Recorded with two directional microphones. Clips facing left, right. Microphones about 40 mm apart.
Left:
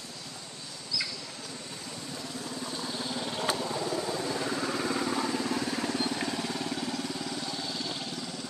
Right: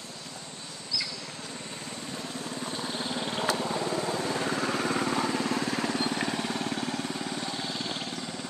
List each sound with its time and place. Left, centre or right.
2.9 s vehicle: right
3.8 s vehicle: right